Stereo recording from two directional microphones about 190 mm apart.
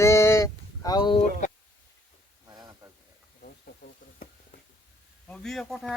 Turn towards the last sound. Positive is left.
turn(degrees=0)  # may be behind; listen again after turning